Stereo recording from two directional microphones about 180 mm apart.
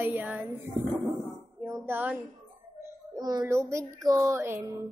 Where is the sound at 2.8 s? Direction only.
20° right (ahead or behind).